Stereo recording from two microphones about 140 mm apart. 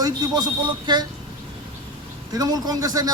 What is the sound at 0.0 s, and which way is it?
Speech, 30° right (ahead or behind).